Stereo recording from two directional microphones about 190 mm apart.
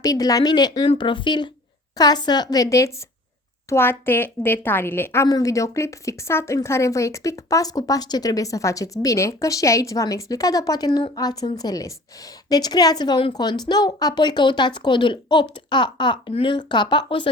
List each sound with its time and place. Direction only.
0.0 s a woman's voice: 20° left (ahead or behind)